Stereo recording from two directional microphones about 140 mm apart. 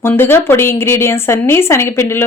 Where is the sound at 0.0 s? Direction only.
15° left (ahead or behind).